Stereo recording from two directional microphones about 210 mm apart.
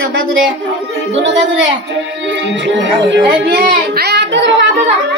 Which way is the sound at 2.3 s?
60° right (ahead or behind).